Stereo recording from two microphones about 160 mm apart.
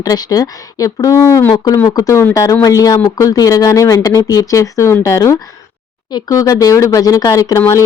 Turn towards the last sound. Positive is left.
turn(degrees=20)  # may be behind; listen again after turning